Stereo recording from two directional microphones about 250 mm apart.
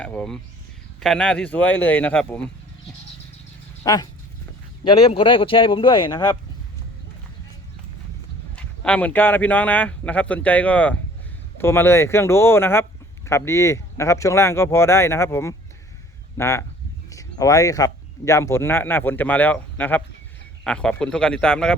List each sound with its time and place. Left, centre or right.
0.0 s speech: centre
3.8 s speech: centre
8.5 s speech: centre